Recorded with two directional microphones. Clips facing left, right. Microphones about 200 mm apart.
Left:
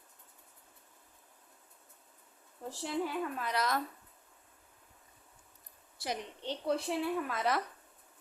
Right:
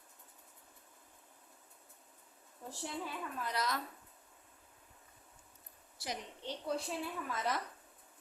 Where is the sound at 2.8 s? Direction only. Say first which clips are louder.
Left 8 dB; 70° left (ahead or behind).